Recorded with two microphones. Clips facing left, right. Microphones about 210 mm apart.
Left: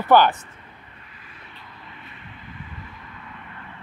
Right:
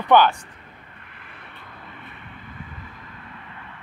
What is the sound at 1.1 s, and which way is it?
Vehicle, 60° right (ahead or behind).